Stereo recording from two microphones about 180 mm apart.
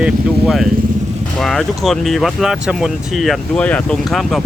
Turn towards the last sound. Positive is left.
turn(degrees=0)  # may be behind; listen again after turning